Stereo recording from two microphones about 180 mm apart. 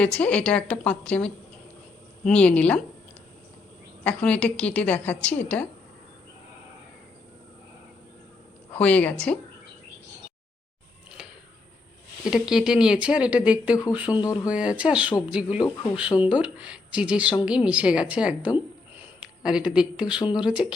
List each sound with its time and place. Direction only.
0.0 s a woman's voice: 5° left (ahead or behind)
4.0 s a woman's voice: 5° left (ahead or behind)
8.7 s a woman's voice: 5° left (ahead or behind)
12.3 s speech: 5° right (ahead or behind)
14.2 s speech: 20° left (ahead or behind)
14.5 s speech: 5° right (ahead or behind)